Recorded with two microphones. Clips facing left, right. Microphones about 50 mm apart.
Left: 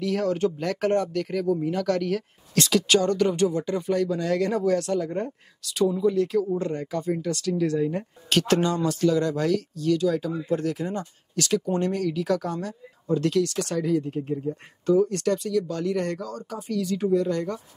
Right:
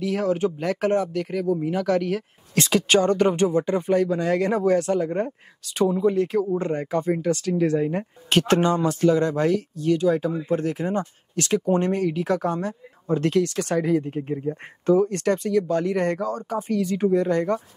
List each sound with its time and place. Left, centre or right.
0.0 s speech: centre
2.5 s speech: right